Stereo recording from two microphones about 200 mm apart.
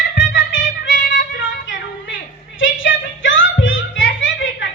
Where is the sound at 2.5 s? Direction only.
70° left (ahead or behind).